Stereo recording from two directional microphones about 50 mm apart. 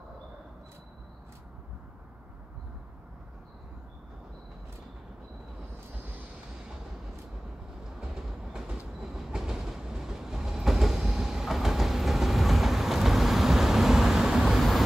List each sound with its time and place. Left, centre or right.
8.3 s train: centre